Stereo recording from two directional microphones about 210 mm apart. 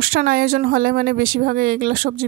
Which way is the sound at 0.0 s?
45° right (ahead or behind).